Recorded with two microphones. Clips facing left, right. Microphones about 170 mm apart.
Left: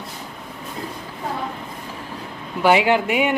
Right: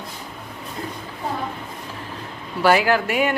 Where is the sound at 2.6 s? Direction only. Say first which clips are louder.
Left 1 dB; 20° left (ahead or behind).